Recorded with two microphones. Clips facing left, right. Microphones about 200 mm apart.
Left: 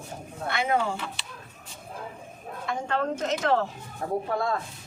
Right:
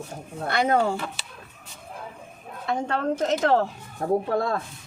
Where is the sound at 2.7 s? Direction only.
35° right (ahead or behind).